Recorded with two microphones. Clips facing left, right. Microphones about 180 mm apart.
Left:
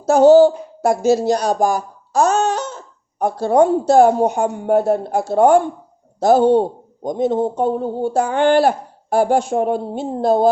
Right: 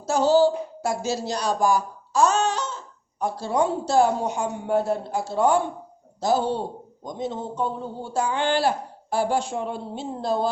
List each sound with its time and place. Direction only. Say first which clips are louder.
0.0 s speech: left 9 dB; 55° left (ahead or behind)